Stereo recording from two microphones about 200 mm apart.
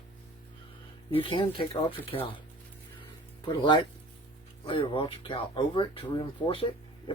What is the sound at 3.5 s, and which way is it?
Speech, 20° left (ahead or behind).